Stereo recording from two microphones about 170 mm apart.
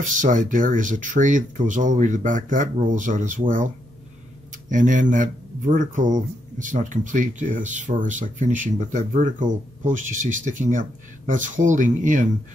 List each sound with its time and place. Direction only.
0.0 s speech: 50° right (ahead or behind)